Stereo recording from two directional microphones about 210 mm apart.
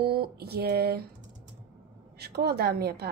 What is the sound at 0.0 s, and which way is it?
A woman's voice, 50° right (ahead or behind).